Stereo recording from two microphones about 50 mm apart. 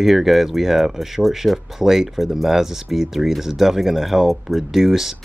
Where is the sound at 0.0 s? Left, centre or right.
Centre.